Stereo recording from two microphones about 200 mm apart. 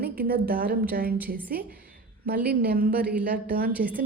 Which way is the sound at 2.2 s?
50° right (ahead or behind).